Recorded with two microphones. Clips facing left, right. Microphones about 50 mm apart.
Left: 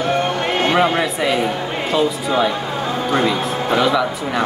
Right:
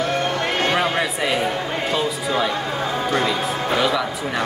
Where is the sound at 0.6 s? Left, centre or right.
Left.